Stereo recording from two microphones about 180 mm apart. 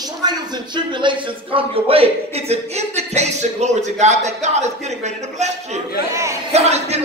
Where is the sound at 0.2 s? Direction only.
25° right (ahead or behind).